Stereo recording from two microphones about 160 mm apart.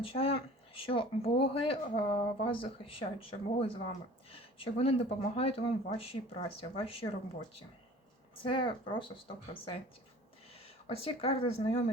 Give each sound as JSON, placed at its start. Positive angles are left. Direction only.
{"t": 0.0, "sound": "speech", "side_deg": 35}
{"t": 8.4, "sound": "speech", "side_deg": 30}
{"t": 10.8, "sound": "speech", "side_deg": 40}